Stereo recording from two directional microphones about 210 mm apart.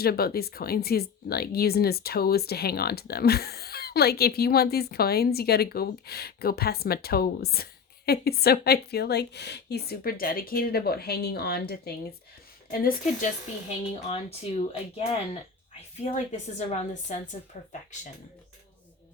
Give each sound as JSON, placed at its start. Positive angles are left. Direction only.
{"t": 0.0, "sound": "speech", "side_deg": 45}
{"t": 12.8, "sound": "a woman's voice", "side_deg": 35}